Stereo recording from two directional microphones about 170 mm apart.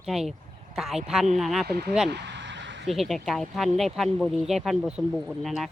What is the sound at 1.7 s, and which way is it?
Speech, 70° right (ahead or behind).